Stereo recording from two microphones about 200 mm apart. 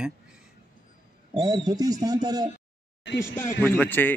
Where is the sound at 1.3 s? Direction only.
20° right (ahead or behind).